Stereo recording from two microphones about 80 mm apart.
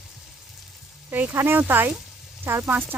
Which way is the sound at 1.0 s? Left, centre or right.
Right.